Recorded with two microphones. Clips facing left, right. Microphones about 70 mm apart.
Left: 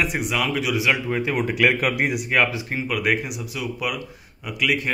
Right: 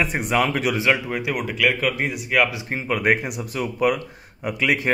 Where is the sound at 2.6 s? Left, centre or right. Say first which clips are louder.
Right 1 dB; right.